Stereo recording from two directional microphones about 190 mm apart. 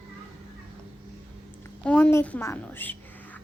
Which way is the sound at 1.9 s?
10° left (ahead or behind).